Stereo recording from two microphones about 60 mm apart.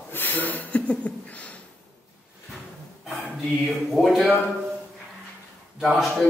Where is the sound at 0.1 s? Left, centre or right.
Left.